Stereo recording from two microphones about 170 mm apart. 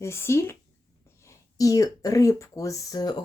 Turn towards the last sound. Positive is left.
turn(degrees=20)  # may be behind; listen again after turning